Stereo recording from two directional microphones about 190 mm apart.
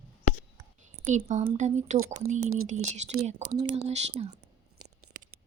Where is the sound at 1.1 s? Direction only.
40° right (ahead or behind).